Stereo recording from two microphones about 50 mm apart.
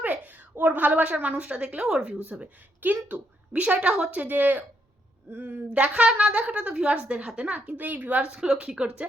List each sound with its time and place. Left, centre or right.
0.0 s a sound: right
0.6 s a woman's voice: right; by 2.0 s centre
2.4 s speech: right
3.5 s a woman's voice: right
4.1 s a woman's voice: right
8.2 s a woman's voice: centre